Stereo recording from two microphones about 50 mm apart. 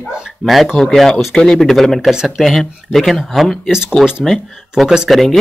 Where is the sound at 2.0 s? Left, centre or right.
Centre.